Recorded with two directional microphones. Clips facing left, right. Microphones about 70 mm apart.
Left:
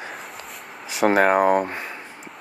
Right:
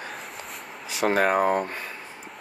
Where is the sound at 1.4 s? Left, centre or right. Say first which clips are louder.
Left 4 dB; left.